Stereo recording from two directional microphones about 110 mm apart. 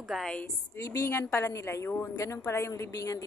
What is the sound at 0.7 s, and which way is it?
A woman's voice, 25° left (ahead or behind).